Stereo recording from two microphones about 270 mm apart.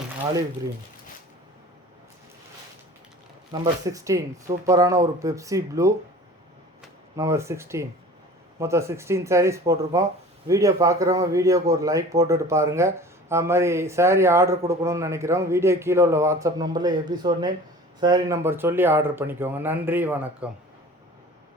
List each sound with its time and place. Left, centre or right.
3.5 s a man's voice: centre
7.2 s a man's voice: centre